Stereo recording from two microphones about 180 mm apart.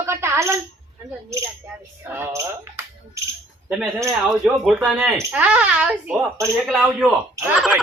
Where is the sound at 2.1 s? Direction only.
10° right (ahead or behind).